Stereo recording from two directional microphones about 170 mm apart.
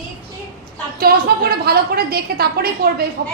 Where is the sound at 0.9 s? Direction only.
65° right (ahead or behind).